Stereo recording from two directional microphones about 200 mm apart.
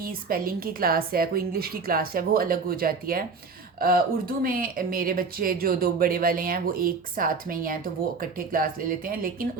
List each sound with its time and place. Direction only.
0.0 s speech: 45° right (ahead or behind)